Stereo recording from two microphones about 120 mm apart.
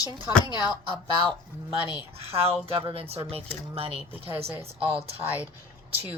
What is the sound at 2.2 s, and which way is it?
Speech, 55° right (ahead or behind).